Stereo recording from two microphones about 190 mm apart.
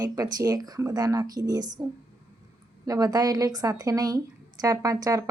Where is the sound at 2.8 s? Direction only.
20° right (ahead or behind).